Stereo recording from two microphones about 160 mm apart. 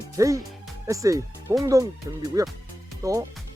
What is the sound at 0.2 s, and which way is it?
Speech, 20° right (ahead or behind).